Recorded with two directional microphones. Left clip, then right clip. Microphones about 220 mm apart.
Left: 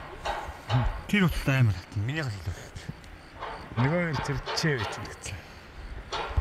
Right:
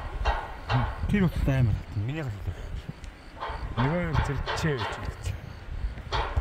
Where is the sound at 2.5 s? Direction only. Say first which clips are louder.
Left 1 dB; 15° left (ahead or behind).